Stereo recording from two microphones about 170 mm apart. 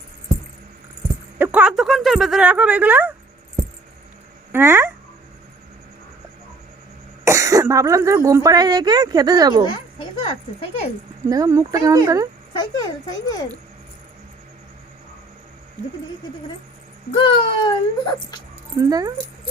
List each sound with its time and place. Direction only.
1.4 s speech: 10° right (ahead or behind)
4.5 s speech: 15° right (ahead or behind)
7.3 s speech: 20° right (ahead or behind)
9.6 s speech: 30° left (ahead or behind)
11.3 s speech: 20° right (ahead or behind)
17.2 s speech: 30° left (ahead or behind)
18.8 s speech: 20° right (ahead or behind)